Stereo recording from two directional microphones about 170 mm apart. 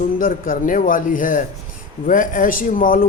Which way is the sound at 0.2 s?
50° left (ahead or behind).